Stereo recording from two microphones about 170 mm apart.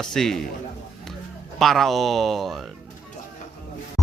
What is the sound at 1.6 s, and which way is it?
Speech, centre (ahead or behind).